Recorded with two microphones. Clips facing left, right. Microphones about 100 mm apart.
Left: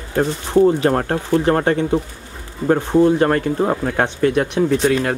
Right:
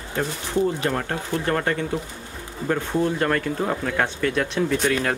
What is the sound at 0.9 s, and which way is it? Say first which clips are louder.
Speech: left 8 dB; 40° left (ahead or behind).